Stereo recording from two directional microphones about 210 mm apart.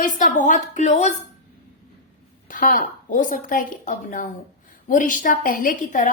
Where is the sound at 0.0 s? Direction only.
40° left (ahead or behind).